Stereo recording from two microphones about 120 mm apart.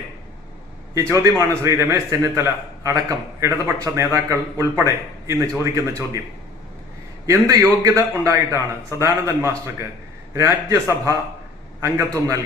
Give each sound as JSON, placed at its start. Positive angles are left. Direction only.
{"t": 1.1, "sound": "a man's voice", "side_deg": -25}
{"t": 7.3, "sound": "a man's voice", "side_deg": -25}